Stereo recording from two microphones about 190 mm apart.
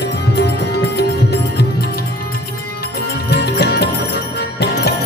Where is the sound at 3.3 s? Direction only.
60° left (ahead or behind).